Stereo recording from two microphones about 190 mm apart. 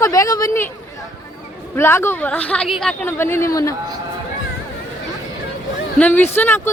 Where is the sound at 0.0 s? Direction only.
15° left (ahead or behind).